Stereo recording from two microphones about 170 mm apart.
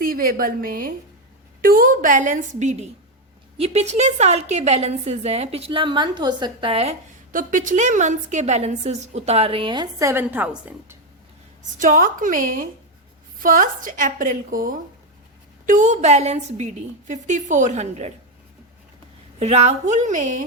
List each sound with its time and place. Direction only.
0.0 s a woman's voice: 55° right (ahead or behind); by 6.9 s 35° right (ahead or behind)
7.3 s a woman's voice: 50° right (ahead or behind); by 10.9 s 10° right (ahead or behind)
11.8 s a woman's voice: 50° right (ahead or behind)
19.4 s a woman's voice: 40° right (ahead or behind)